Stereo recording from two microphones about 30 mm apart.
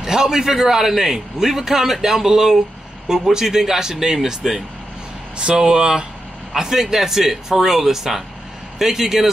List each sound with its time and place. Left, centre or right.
0.0 s speech: centre
5.6 s speech: right